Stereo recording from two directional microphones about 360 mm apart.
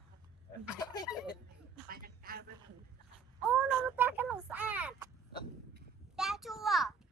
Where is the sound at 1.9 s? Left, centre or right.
Right.